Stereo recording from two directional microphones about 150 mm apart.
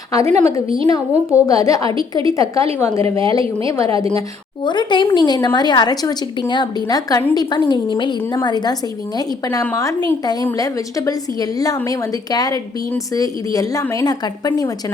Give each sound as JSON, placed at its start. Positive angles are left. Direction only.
{"t": 0.1, "sound": "a woman's voice", "side_deg": 20}
{"t": 4.6, "sound": "a woman's voice", "side_deg": 30}